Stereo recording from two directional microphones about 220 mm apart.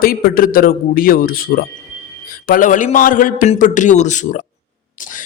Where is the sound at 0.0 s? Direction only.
40° left (ahead or behind).